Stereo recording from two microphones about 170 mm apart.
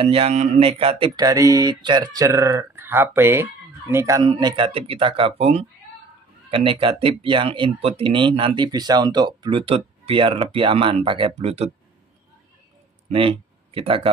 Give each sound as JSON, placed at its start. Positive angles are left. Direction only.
{"t": 0.0, "sound": "a sound", "side_deg": -35}
{"t": 6.5, "sound": "speech", "side_deg": -30}
{"t": 13.1, "sound": "speech", "side_deg": -35}